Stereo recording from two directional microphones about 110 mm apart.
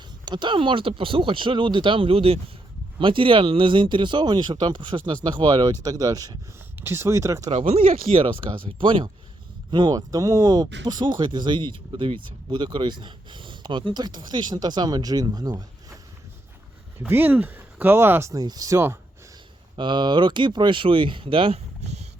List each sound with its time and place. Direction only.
0.3 s speech: 45° right (ahead or behind)
6.7 s speech: 25° right (ahead or behind)
7.5 s speech: 60° right (ahead or behind)
9.7 s speech: 40° right (ahead or behind)
17.1 s speech: 15° right (ahead or behind)
19.7 s speech: 45° right (ahead or behind)